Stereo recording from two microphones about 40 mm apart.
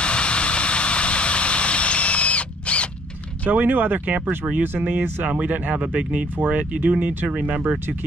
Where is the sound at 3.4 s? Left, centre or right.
Right.